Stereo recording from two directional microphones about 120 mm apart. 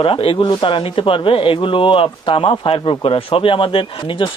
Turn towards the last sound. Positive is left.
turn(degrees=45)  # may be behind; listen again after turning